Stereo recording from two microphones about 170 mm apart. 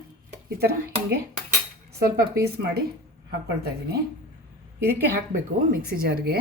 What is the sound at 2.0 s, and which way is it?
Speech, 70° right (ahead or behind).